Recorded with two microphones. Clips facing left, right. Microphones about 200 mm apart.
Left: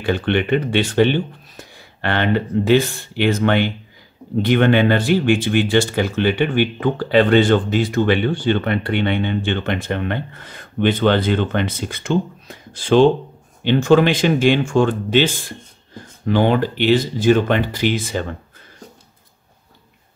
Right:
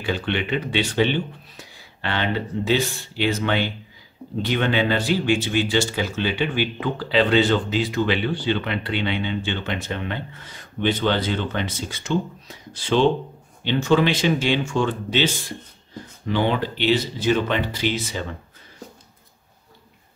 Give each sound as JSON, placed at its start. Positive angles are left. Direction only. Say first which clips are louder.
{"t": 0.0, "sound": "speech", "louder": "left 6 dB", "side_deg": 55}